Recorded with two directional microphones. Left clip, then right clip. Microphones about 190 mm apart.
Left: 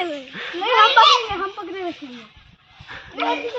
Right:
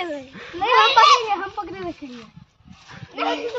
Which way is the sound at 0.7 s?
20° right (ahead or behind).